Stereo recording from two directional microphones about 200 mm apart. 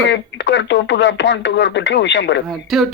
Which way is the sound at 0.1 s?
65° left (ahead or behind).